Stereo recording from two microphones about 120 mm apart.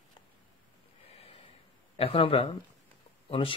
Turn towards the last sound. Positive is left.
turn(degrees=50)  # may be behind; listen again after turning